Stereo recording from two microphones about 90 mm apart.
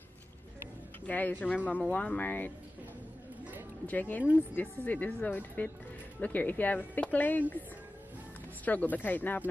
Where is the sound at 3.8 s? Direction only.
20° left (ahead or behind).